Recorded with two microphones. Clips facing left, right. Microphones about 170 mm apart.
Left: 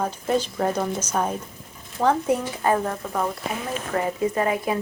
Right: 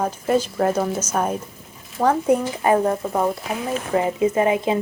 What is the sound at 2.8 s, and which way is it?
Speech, 20° right (ahead or behind).